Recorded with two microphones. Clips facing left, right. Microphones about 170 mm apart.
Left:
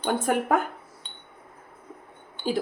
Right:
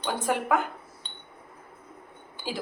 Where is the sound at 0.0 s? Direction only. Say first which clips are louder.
Left 3 dB; 45° left (ahead or behind).